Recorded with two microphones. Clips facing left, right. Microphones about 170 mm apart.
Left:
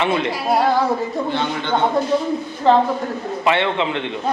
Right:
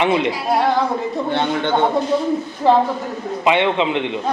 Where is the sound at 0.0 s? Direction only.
15° right (ahead or behind).